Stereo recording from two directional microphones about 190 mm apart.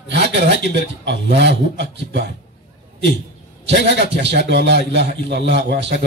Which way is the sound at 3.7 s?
65° right (ahead or behind).